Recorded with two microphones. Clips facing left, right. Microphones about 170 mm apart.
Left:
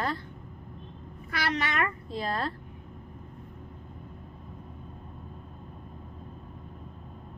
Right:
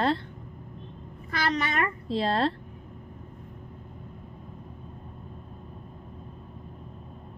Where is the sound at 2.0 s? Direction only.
75° right (ahead or behind).